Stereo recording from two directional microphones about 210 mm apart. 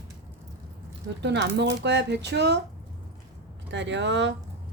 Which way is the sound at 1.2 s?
55° right (ahead or behind).